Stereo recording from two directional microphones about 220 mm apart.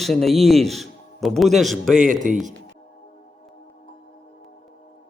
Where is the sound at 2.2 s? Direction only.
35° right (ahead or behind).